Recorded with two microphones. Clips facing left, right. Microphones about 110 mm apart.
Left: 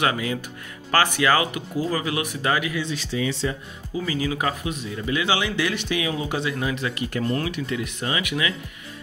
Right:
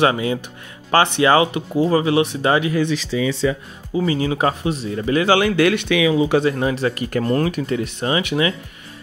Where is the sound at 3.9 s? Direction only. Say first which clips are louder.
Right 6 dB; 30° right (ahead or behind).